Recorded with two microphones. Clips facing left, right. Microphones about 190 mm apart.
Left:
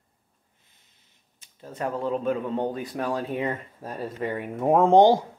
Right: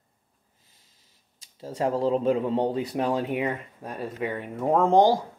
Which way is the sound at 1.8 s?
30° right (ahead or behind).